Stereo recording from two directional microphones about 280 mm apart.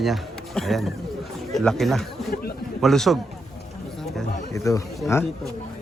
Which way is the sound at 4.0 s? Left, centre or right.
Centre.